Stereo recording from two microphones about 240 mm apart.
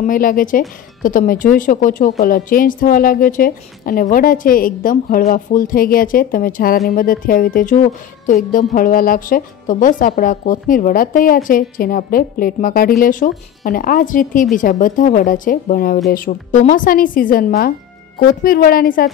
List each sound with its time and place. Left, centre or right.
0.0 s speech: left